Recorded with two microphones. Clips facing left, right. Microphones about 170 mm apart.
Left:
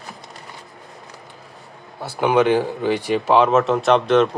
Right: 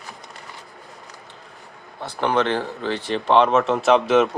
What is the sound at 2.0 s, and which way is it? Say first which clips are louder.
Speech: left 4 dB; 10° left (ahead or behind).